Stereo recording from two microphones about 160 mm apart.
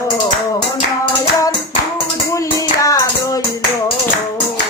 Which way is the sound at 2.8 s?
20° left (ahead or behind).